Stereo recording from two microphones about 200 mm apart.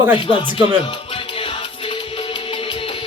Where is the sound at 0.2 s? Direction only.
25° left (ahead or behind).